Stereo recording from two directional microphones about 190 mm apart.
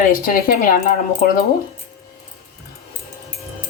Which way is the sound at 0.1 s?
50° left (ahead or behind).